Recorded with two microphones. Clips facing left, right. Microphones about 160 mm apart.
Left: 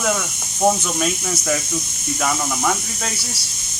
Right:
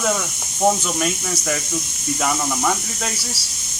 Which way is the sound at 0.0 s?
Centre (ahead or behind).